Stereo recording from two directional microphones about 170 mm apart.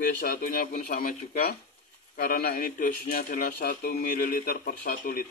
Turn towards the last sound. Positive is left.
turn(degrees=60)  # may be behind; listen again after turning